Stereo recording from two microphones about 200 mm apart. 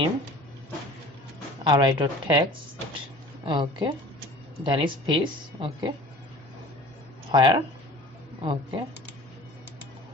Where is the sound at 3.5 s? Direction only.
25° right (ahead or behind).